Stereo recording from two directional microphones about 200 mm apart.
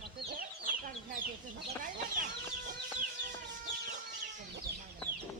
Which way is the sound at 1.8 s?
45° right (ahead or behind).